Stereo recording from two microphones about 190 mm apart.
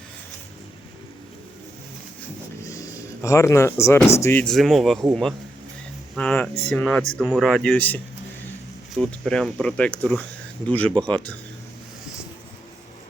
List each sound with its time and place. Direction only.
3.2 s speech: 15° left (ahead or behind)